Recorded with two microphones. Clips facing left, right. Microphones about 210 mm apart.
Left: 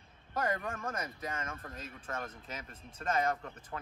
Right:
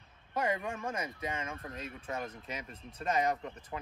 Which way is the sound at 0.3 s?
10° right (ahead or behind).